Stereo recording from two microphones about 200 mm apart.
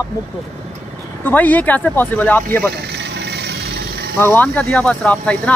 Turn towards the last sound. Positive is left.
turn(degrees=5)  # may be behind; listen again after turning